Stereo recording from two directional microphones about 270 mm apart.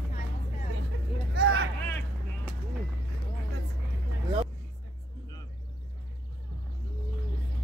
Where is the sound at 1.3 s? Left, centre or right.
Right.